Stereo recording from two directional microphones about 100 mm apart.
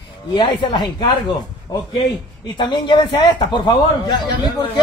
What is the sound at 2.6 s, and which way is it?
A man's voice, 50° left (ahead or behind).